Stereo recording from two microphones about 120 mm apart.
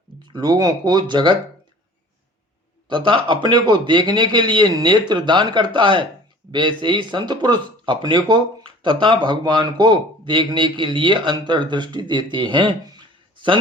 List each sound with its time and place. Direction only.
0.3 s speech: 35° right (ahead or behind)
2.9 s speech: 40° right (ahead or behind)